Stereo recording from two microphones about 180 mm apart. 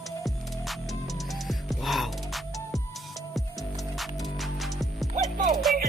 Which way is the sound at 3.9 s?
Centre (ahead or behind).